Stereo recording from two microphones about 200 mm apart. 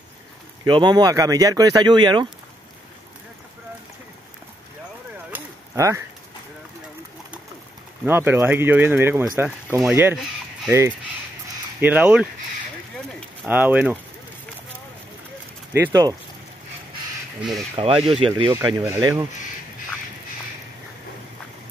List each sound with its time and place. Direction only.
0.7 s speech: 25° right (ahead or behind)
5.3 s a sound: 15° right (ahead or behind)
8.0 s speech: 10° right (ahead or behind)
11.8 s speech: 5° right (ahead or behind)
13.5 s speech: 10° right (ahead or behind)
15.7 s speech: 15° right (ahead or behind)
17.4 s speech: centre (ahead or behind)
18.0 s speech: 25° right (ahead or behind)